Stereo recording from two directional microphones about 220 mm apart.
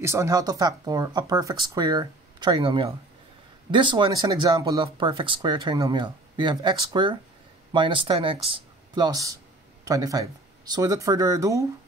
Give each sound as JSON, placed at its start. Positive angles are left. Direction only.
{"t": 0.0, "sound": "speech", "side_deg": -10}